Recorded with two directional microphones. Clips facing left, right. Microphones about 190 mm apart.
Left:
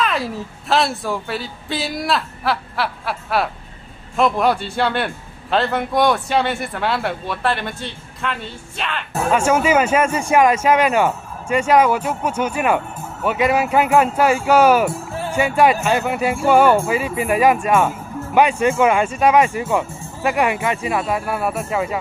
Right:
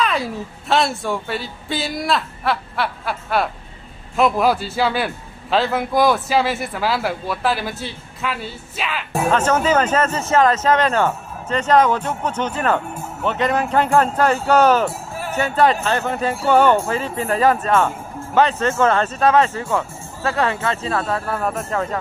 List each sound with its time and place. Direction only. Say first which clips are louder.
0.0 s a woman's voice: even; centre (ahead or behind)
9.3 s speech: left 2 dB; 10° left (ahead or behind)
14.9 s music: left 3 dB; 25° left (ahead or behind)
15.3 s speech: left 1 dB; 10° left (ahead or behind)